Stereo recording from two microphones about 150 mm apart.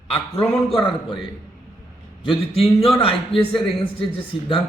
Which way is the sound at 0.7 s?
35° left (ahead or behind).